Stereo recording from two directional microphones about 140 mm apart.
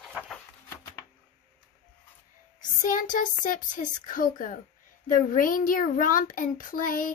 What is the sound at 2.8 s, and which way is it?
A child's voice, 70° left (ahead or behind).